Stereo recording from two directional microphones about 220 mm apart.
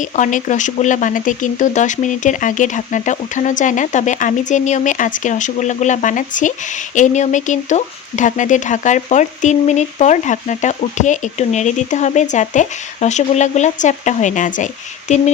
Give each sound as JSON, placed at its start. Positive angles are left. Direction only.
{"t": 0.0, "sound": "speech", "side_deg": 35}